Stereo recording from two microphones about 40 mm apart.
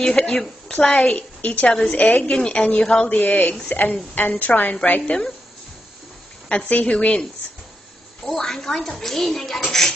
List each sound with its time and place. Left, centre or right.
0.1 s a woman's voice: centre; by 1.7 s left
1.7 s a woman's voice: left
2.0 s speech: left
2.3 s a woman's voice: left
3.2 s a woman's voice: left
4.3 s speech: left
6.5 s a woman's voice: left
8.2 s speech: centre